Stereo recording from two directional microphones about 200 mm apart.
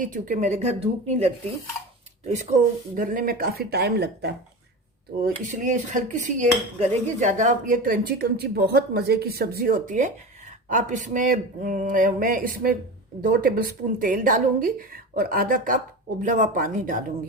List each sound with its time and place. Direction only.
0.0 s a woman's voice: 40° right (ahead or behind)
2.2 s dishes: 35° right (ahead or behind); by 4.4 s 55° right (ahead or behind)
5.2 s dishes: 40° right (ahead or behind)